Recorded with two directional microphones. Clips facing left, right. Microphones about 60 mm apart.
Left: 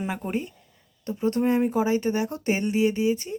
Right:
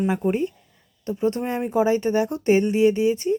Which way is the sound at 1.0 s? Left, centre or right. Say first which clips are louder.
Even; right.